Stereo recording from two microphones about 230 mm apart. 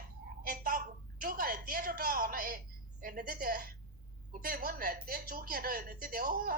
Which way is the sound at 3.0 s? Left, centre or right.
Right.